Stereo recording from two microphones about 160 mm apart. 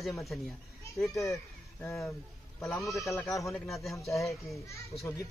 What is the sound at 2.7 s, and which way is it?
Speech, 20° left (ahead or behind).